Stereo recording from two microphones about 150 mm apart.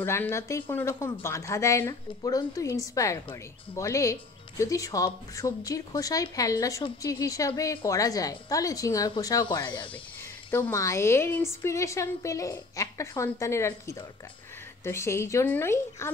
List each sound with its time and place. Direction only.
0.0 s a woman's voice: 15° left (ahead or behind)